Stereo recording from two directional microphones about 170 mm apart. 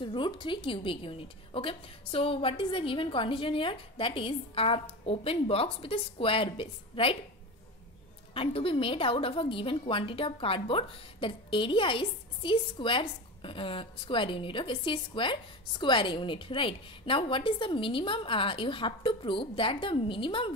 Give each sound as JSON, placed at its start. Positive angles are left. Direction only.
{"t": 0.0, "sound": "a woman's voice", "side_deg": 30}
{"t": 8.4, "sound": "a woman's voice", "side_deg": 35}